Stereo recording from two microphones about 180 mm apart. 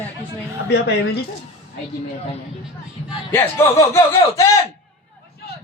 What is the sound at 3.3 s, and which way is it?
Speech, 15° left (ahead or behind).